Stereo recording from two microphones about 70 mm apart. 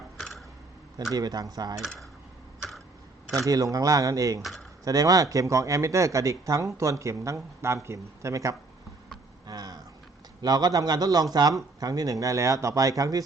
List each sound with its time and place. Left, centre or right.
1.1 s speech: right
2.6 s a sound: centre
3.3 s speech: right
9.5 s vehicle: right
10.4 s speech: right